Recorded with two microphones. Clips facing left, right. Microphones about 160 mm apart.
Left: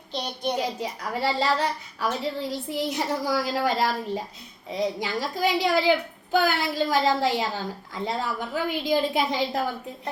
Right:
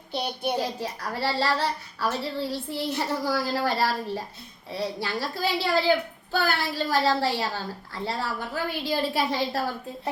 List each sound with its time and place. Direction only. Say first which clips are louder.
0.1 s child singing: even; 10° right (ahead or behind)
0.5 s a child's voice: even; 15° left (ahead or behind)